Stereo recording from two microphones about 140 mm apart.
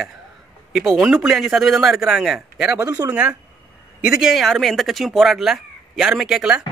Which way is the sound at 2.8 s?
25° right (ahead or behind).